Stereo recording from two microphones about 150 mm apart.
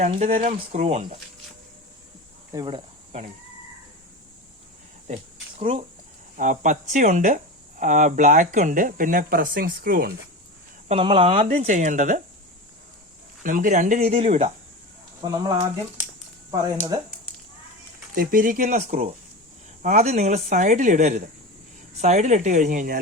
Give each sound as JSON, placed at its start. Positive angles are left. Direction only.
{"t": 0.2, "sound": "speech", "side_deg": -45}
{"t": 2.5, "sound": "speech", "side_deg": -30}
{"t": 5.0, "sound": "a sound", "side_deg": -50}
{"t": 6.3, "sound": "speech", "side_deg": -60}
{"t": 10.8, "sound": "speech", "side_deg": -35}
{"t": 13.4, "sound": "speech", "side_deg": -60}
{"t": 15.2, "sound": "speech", "side_deg": -25}
{"t": 18.1, "sound": "speech", "side_deg": -70}
{"t": 19.8, "sound": "speech", "side_deg": -50}